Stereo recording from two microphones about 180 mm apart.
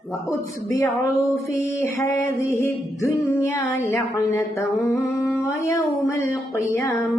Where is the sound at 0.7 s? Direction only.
15° left (ahead or behind).